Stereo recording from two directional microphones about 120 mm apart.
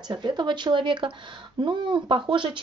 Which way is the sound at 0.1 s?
40° right (ahead or behind).